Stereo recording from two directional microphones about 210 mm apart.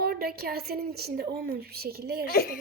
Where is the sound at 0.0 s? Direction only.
45° right (ahead or behind).